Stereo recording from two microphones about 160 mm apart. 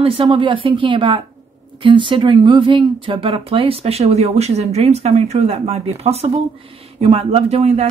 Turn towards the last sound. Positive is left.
turn(degrees=-40)  # may be behind; listen again after turning